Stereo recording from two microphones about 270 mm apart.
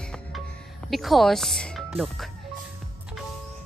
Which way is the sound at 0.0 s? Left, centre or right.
Centre.